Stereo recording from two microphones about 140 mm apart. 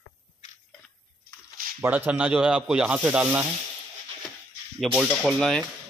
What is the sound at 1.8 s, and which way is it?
Speech, 15° right (ahead or behind).